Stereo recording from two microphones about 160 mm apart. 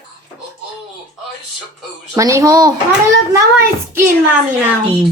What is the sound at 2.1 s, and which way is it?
Speech, 20° right (ahead or behind).